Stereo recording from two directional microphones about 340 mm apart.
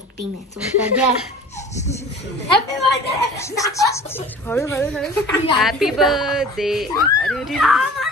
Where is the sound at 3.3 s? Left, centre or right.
Centre.